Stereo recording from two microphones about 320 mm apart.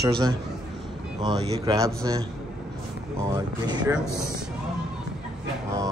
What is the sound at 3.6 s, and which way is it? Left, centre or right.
Speech, centre.